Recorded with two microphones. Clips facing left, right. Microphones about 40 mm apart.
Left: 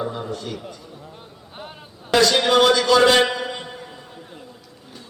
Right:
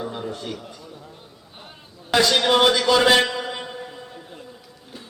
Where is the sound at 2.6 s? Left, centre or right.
Centre.